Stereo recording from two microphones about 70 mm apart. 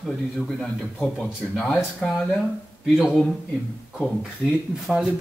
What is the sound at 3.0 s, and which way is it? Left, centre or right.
Speech, centre.